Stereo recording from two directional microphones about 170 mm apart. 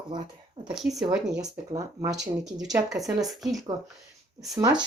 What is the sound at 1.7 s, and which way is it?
Speech, 20° right (ahead or behind).